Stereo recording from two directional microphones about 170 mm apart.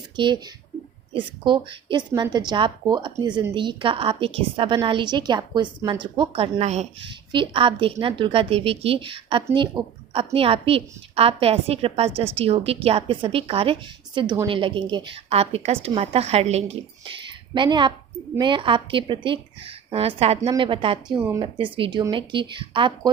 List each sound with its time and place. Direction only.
0.2 s a woman's voice: 25° right (ahead or behind)
7.3 s a woman's voice: 30° right (ahead or behind)
17.5 s a woman's voice: 30° right (ahead or behind)